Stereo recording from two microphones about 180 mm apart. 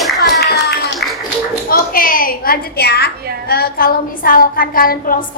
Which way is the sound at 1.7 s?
50° left (ahead or behind).